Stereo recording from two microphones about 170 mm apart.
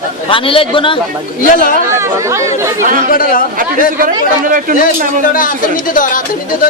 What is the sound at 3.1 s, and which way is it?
Speech, 55° left (ahead or behind).